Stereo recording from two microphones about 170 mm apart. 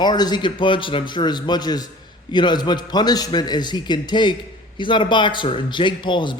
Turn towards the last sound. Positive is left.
turn(degrees=30)  # may be behind; listen again after turning